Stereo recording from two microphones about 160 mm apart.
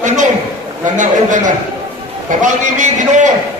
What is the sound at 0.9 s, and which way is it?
A man's voice, 50° right (ahead or behind).